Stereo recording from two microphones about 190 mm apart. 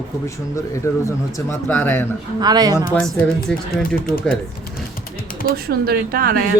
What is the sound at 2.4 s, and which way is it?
Speech, 20° right (ahead or behind).